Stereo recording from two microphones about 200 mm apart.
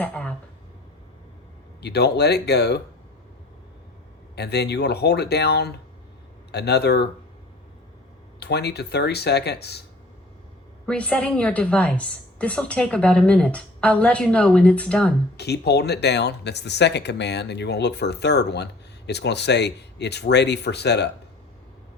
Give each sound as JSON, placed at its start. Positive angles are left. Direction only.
{"t": 0.0, "sound": "a sound", "side_deg": 5}
{"t": 1.8, "sound": "speech", "side_deg": 55}
{"t": 4.4, "sound": "speech", "side_deg": 55}
{"t": 8.4, "sound": "speech", "side_deg": 55}
{"t": 10.8, "sound": "a woman's voice", "side_deg": 5}
{"t": 15.4, "sound": "speech", "side_deg": 55}